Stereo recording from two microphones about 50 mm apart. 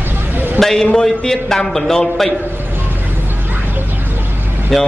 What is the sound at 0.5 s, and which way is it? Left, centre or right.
Speech, centre.